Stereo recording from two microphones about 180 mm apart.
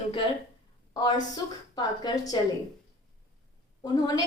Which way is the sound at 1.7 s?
25° left (ahead or behind).